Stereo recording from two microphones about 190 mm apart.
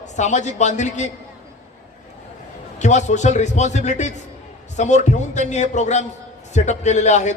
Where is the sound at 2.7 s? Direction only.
40° left (ahead or behind).